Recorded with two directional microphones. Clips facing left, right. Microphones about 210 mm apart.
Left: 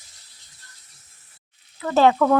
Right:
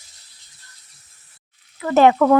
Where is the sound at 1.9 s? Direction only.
15° right (ahead or behind).